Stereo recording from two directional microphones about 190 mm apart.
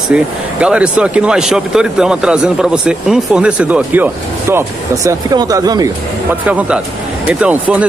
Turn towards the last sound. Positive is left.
turn(degrees=-5)  # may be behind; listen again after turning